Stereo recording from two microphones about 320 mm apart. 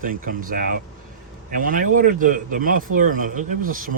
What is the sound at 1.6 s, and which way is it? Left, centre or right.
Speech, right.